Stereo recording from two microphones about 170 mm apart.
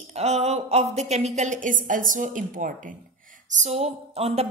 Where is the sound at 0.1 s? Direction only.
40° right (ahead or behind).